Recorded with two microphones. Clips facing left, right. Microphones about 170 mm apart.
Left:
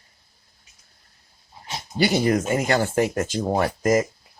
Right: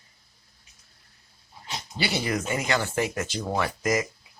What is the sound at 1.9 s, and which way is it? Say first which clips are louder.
Speech: left 8 dB; 45° left (ahead or behind).